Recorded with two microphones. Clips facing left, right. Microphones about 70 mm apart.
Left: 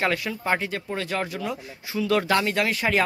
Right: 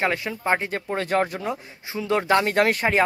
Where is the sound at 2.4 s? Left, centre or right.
Right.